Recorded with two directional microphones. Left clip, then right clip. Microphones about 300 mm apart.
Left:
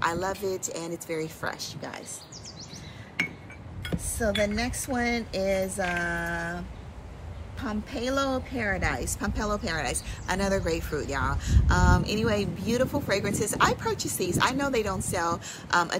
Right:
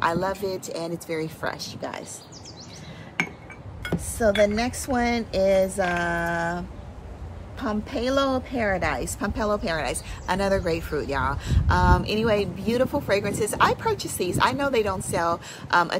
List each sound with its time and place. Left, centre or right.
0.0 s a woman's voice: centre
4.3 s speech: right
4.6 s speech: centre
7.6 s a woman's voice: centre